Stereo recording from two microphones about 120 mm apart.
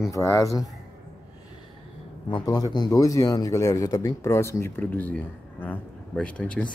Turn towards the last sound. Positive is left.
turn(degrees=10)  # may be behind; listen again after turning